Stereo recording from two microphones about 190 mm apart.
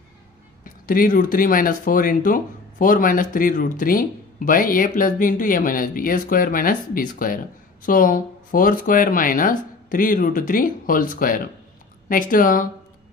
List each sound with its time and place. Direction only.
0.7 s speech: 45° left (ahead or behind)